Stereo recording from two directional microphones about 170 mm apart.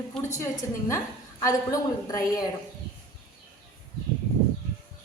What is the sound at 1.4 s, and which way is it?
Speech, 20° left (ahead or behind).